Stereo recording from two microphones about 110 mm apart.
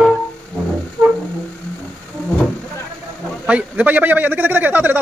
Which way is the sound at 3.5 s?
10° right (ahead or behind).